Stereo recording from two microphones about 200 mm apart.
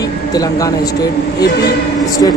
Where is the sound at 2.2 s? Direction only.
20° left (ahead or behind).